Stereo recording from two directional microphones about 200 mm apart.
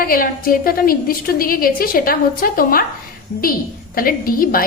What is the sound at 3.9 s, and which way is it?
Speech, 45° left (ahead or behind).